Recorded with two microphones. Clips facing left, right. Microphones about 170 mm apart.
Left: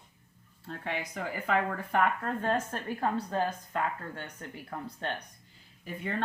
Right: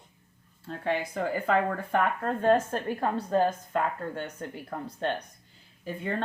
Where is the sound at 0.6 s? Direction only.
35° right (ahead or behind).